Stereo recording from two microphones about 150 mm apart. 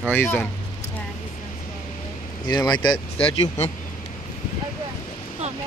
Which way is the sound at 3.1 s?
45° left (ahead or behind).